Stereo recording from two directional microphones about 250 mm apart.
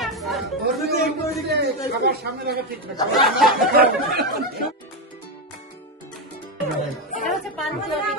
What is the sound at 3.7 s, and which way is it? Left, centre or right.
Speech, right.